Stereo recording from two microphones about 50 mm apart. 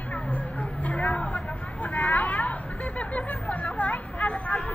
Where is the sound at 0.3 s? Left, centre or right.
Left.